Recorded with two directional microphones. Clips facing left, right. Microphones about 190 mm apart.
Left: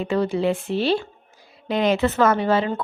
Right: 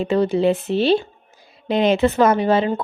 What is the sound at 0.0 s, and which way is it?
Speech, 25° right (ahead or behind).